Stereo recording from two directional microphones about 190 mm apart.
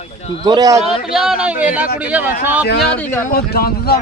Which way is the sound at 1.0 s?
5° right (ahead or behind).